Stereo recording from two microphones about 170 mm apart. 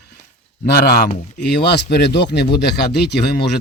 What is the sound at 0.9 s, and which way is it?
Speech, 70° left (ahead or behind).